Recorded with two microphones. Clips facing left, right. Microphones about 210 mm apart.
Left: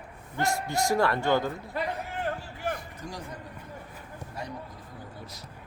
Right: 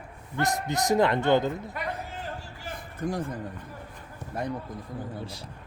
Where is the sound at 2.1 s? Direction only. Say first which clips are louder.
Left 5 dB; 60° left (ahead or behind).